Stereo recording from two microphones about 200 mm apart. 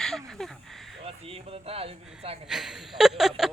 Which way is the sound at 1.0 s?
30° right (ahead or behind).